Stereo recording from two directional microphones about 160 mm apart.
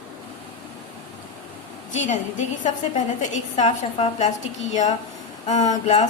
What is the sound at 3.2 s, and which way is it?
A woman's voice, 45° left (ahead or behind).